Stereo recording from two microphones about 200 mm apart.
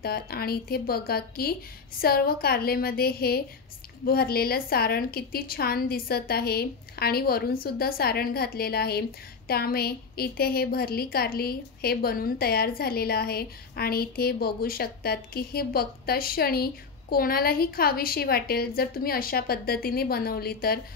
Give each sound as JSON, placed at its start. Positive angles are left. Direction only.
{"t": 0.0, "sound": "a woman's voice", "side_deg": 50}